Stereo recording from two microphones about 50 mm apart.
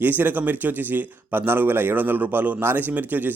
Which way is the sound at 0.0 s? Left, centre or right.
Right.